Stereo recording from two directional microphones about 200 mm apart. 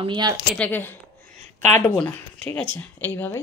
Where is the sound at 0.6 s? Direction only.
10° left (ahead or behind).